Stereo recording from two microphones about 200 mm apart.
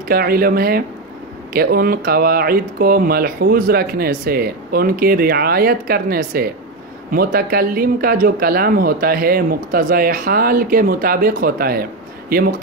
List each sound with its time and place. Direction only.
0.1 s speech: 50° right (ahead or behind)